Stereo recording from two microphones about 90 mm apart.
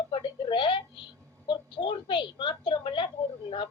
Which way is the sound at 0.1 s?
65° left (ahead or behind).